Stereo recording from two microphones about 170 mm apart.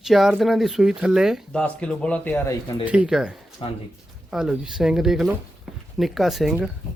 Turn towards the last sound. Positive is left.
turn(degrees=0)  # may be behind; listen again after turning